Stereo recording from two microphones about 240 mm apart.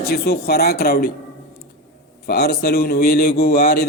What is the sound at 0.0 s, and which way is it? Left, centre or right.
Speech, left.